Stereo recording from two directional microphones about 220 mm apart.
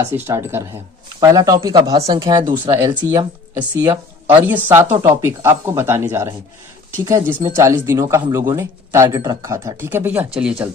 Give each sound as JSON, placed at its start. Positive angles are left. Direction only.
{"t": 0.0, "sound": "speech", "side_deg": -10}